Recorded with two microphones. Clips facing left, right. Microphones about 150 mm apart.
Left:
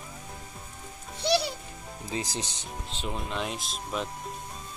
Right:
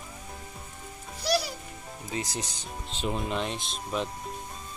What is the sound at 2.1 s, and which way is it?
Speech, 30° left (ahead or behind).